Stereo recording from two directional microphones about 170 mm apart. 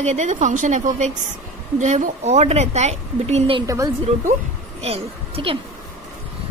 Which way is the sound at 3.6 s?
20° right (ahead or behind).